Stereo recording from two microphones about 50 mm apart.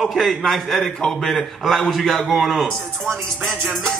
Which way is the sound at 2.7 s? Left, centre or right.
Centre.